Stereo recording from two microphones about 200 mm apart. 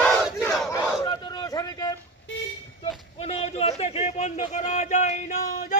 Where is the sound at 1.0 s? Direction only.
20° left (ahead or behind).